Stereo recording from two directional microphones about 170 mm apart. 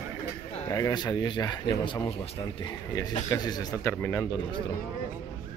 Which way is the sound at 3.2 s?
25° left (ahead or behind).